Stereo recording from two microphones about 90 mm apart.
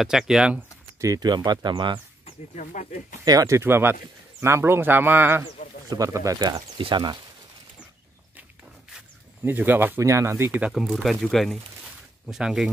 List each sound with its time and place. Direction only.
0.0 s speech: 5° right (ahead or behind)
0.9 s speech: 40° right (ahead or behind); by 2.0 s 60° right (ahead or behind)
3.3 s speech: 35° right (ahead or behind)
5.9 s speech: 40° right (ahead or behind)
9.4 s speech: 20° right (ahead or behind)
10.7 s speech: 5° right (ahead or behind)